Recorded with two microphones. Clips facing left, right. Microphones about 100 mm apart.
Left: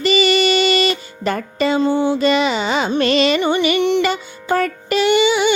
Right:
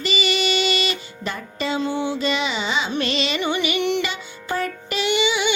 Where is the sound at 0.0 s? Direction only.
45° left (ahead or behind).